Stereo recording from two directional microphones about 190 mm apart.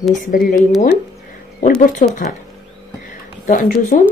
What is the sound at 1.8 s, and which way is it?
Speech, 40° left (ahead or behind).